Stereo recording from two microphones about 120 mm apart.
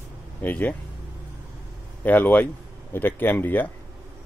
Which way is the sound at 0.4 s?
15° left (ahead or behind).